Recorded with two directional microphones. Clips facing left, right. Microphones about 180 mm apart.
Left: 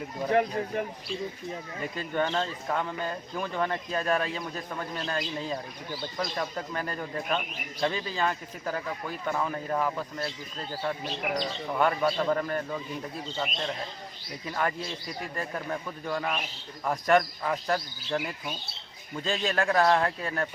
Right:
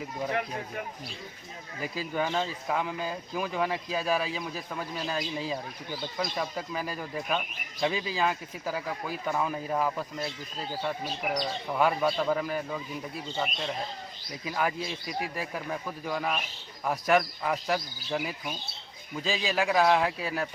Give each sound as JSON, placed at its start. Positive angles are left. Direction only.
{"t": 1.8, "sound": "speech", "side_deg": -5}